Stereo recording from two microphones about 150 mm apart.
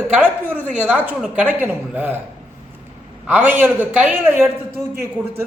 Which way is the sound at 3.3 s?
10° right (ahead or behind).